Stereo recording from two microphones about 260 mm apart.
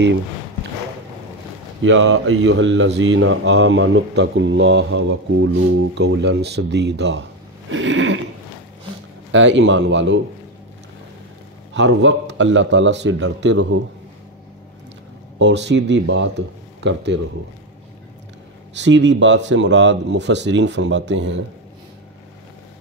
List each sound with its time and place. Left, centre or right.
1.8 s speech: right
9.3 s speech: right
11.7 s speech: right
15.3 s speech: right
18.8 s speech: right